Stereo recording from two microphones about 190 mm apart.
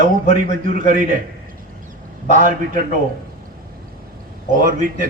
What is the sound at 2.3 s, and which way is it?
Speech, 45° right (ahead or behind).